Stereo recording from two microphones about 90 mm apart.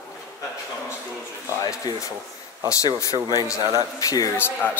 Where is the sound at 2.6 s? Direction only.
45° left (ahead or behind).